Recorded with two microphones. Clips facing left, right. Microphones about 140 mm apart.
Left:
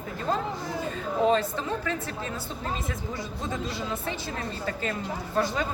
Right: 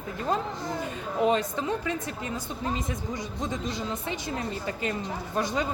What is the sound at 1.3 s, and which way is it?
Speech, 15° right (ahead or behind).